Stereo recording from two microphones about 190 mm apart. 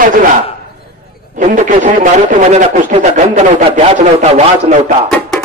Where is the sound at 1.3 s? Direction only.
40° right (ahead or behind).